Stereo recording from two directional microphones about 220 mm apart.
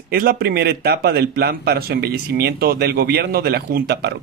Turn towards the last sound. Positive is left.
turn(degrees=-45)  # may be behind; listen again after turning